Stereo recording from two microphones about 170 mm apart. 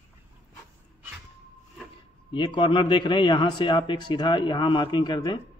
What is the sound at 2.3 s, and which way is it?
A man's voice, 30° left (ahead or behind).